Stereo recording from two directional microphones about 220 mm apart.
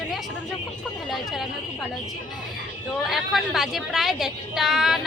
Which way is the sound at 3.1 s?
Centre (ahead or behind).